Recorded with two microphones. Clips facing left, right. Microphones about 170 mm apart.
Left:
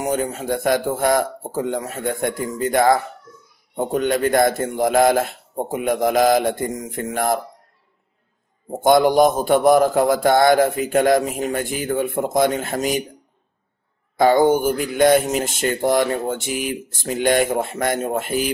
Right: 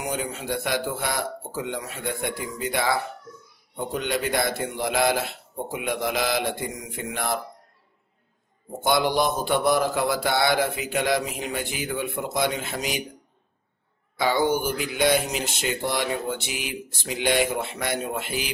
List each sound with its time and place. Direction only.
0.0 s speech: 45° left (ahead or behind)
8.6 s speech: 50° left (ahead or behind)
14.1 s speech: 50° left (ahead or behind)